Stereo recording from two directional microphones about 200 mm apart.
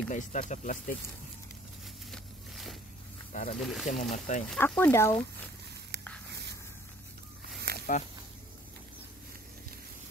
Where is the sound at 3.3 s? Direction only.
40° left (ahead or behind).